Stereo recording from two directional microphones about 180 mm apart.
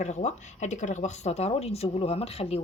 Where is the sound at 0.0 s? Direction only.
40° left (ahead or behind).